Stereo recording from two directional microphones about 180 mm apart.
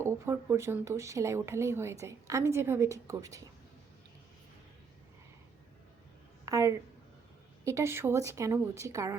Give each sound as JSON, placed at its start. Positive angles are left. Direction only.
{"t": 0.0, "sound": "speech", "side_deg": -15}
{"t": 6.4, "sound": "a sound", "side_deg": -20}
{"t": 7.6, "sound": "speech", "side_deg": -15}